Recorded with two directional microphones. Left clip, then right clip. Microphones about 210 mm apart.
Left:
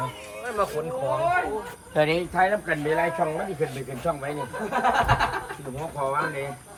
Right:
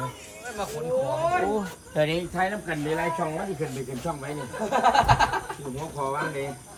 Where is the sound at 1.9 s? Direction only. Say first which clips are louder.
Left 3 dB; 15° left (ahead or behind).